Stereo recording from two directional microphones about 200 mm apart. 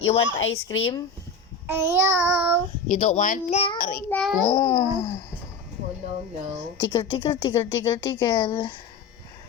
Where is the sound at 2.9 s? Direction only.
35° left (ahead or behind).